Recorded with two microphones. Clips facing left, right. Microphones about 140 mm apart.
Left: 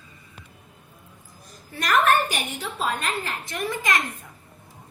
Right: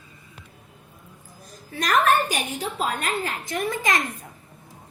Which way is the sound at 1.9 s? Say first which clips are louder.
Even; 40° right (ahead or behind).